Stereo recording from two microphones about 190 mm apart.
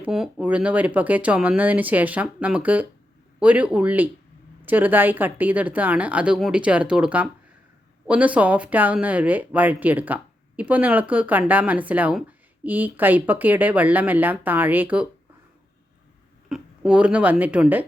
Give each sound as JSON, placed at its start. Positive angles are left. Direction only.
{"t": 0.0, "sound": "speech", "side_deg": -5}
{"t": 16.5, "sound": "speech", "side_deg": -5}